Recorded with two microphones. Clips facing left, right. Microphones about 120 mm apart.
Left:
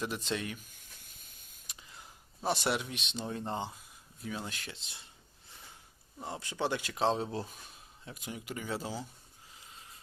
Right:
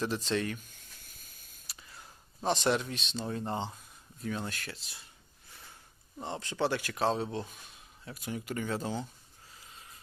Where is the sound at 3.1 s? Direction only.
20° left (ahead or behind).